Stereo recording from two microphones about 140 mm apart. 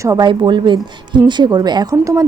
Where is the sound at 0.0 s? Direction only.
25° right (ahead or behind).